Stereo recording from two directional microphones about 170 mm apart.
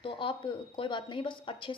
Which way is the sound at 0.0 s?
30° left (ahead or behind).